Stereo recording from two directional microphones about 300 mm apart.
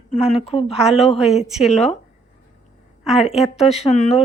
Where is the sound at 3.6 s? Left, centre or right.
Left.